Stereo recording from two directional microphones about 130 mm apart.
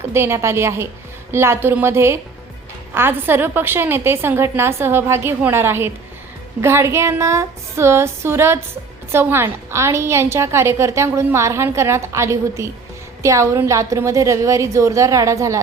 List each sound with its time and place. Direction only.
0.0 s a woman's voice: 20° right (ahead or behind)